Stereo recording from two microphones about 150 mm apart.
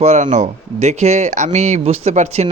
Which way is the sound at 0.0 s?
50° right (ahead or behind).